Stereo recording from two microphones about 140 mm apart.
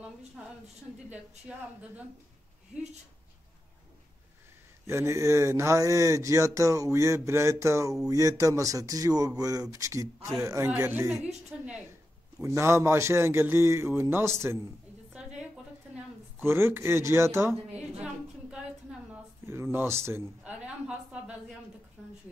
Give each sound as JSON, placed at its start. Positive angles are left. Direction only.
{"t": 4.8, "sound": "speech", "side_deg": -20}
{"t": 11.5, "sound": "a woman's voice", "side_deg": -10}
{"t": 12.4, "sound": "speech", "side_deg": -20}
{"t": 15.1, "sound": "a sound", "side_deg": -5}
{"t": 16.4, "sound": "a woman's voice", "side_deg": -15}
{"t": 19.4, "sound": "a woman's voice", "side_deg": -20}